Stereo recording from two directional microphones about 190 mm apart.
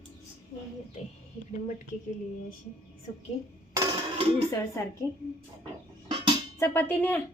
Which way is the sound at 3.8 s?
25° right (ahead or behind).